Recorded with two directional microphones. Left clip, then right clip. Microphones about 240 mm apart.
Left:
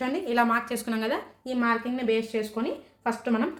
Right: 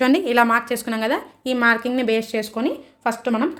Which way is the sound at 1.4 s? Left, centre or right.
Right.